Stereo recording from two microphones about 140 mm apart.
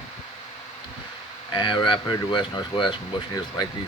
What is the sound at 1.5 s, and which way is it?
Speech, 35° left (ahead or behind).